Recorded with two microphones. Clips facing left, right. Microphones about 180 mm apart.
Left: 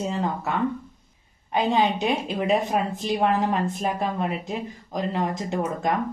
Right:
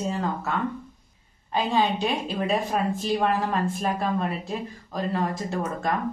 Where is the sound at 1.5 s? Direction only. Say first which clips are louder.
Left 2 dB; 20° left (ahead or behind).